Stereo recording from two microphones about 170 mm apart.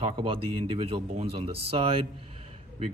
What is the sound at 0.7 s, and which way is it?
Speech, 35° right (ahead or behind).